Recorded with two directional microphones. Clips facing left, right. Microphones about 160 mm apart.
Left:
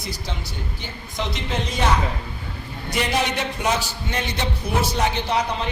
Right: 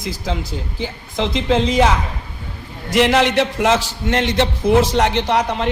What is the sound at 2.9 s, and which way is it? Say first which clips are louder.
A man's voice: right 9 dB; 90° right.